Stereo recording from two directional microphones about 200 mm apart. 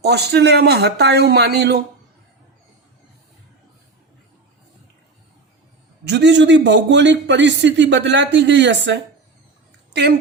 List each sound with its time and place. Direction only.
0.0 s a man's voice: 55° right (ahead or behind)
6.1 s a man's voice: 60° right (ahead or behind)